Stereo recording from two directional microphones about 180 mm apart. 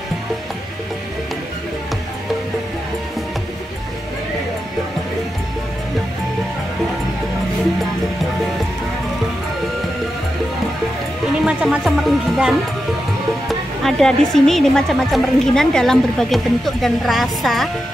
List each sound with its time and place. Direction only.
11.4 s a woman's voice: 5° right (ahead or behind)